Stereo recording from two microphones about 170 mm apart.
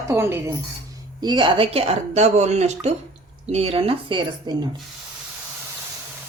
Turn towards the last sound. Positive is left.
turn(degrees=-25)  # may be behind; listen again after turning